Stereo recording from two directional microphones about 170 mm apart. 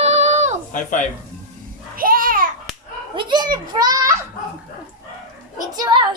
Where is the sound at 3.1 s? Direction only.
25° right (ahead or behind).